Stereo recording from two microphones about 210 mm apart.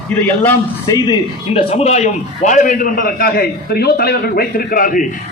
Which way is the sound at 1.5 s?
30° left (ahead or behind).